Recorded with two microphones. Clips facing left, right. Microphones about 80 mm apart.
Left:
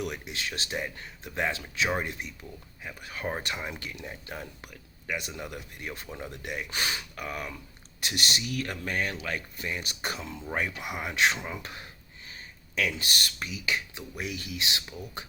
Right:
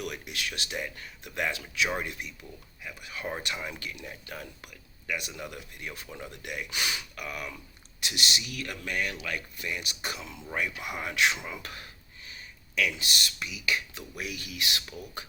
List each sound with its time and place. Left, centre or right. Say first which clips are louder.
0.0 s speech: left 1 dB; left
11.2 s speech: left 1 dB; left
13.7 s speech: right 1 dB; left